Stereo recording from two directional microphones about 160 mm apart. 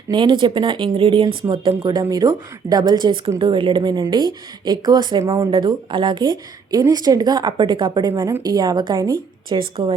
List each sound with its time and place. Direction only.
0.1 s a woman's voice: 30° right (ahead or behind)